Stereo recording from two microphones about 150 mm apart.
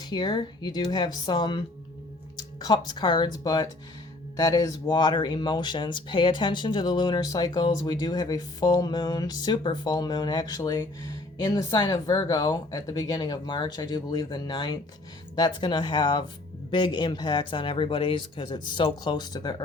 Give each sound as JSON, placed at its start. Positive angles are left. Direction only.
{"t": 0.0, "sound": "speech", "side_deg": 30}
{"t": 11.4, "sound": "speech", "side_deg": 30}